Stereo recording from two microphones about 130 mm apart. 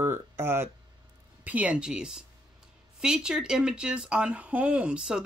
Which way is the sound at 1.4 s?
10° right (ahead or behind).